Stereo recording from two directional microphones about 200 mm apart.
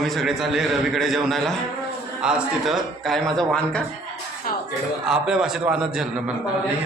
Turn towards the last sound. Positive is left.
turn(degrees=0)  # may be behind; listen again after turning